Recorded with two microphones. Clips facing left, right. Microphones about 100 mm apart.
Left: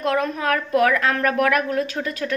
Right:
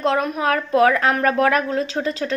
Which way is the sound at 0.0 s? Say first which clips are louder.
Right 2 dB; 25° right (ahead or behind).